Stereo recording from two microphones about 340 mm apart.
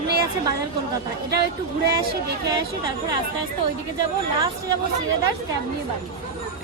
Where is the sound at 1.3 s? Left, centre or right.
Right.